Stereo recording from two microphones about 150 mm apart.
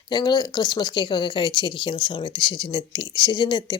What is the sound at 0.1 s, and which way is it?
A woman's voice, 30° left (ahead or behind).